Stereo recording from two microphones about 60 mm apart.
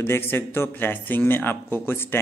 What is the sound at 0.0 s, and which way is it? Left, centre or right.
A man's voice, left.